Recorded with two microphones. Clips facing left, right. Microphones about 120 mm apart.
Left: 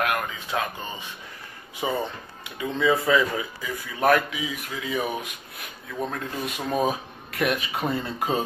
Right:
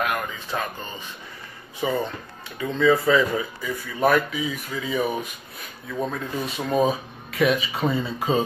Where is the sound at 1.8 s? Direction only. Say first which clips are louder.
Right 2 dB; 15° left (ahead or behind).